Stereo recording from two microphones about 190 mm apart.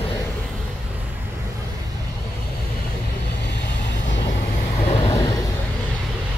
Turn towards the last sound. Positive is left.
turn(degrees=20)  # may be behind; listen again after turning